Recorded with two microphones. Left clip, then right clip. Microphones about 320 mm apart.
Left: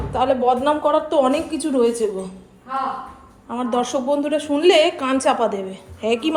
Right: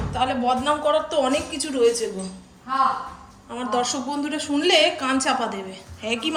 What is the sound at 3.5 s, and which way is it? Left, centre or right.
A woman's voice, centre.